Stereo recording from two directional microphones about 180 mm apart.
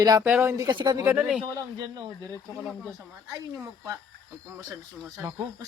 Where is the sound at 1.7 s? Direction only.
20° right (ahead or behind).